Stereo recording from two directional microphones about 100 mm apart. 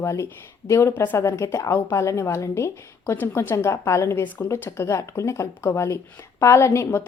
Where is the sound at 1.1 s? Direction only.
30° left (ahead or behind).